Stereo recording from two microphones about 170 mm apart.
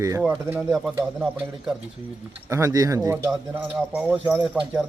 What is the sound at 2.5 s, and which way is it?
Speech, 20° right (ahead or behind).